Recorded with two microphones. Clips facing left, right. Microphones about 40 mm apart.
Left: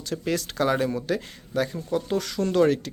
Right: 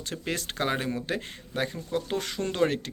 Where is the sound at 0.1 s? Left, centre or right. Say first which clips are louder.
Left 6 dB; right.